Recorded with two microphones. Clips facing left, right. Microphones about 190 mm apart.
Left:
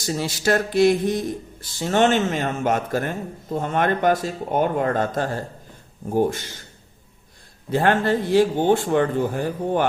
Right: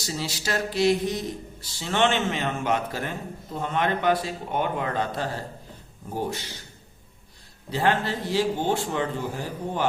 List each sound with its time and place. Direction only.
0.0 s a man's voice: 50° left (ahead or behind)
7.7 s a man's voice: 50° left (ahead or behind)